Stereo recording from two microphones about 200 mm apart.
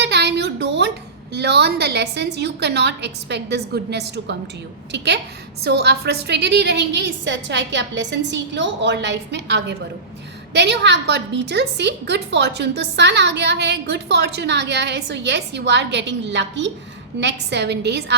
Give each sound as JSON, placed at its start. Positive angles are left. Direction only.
{"t": 0.0, "sound": "a woman's voice", "side_deg": -55}